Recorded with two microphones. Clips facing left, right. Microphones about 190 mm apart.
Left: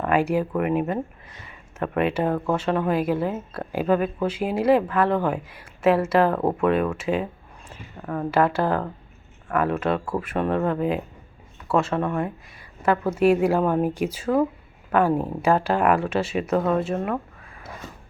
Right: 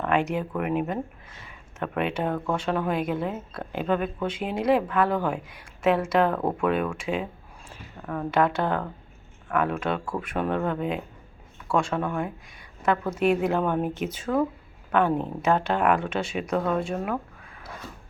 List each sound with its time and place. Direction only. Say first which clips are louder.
0.0 s speech: left 4 dB; 5° left (ahead or behind)